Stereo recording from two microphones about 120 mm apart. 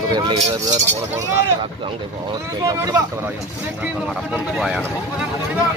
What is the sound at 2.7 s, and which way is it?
Speech, 30° right (ahead or behind).